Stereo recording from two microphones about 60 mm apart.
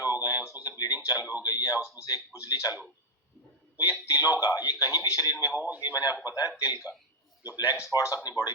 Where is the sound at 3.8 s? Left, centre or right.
Left.